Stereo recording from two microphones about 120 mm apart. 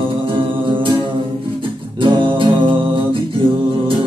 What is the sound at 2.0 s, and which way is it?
Music, 40° right (ahead or behind).